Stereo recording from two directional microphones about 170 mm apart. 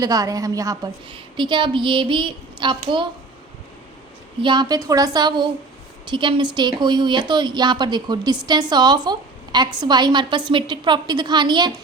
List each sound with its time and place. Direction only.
0.0 s a woman's voice: 20° right (ahead or behind)
4.4 s a woman's voice: 25° right (ahead or behind)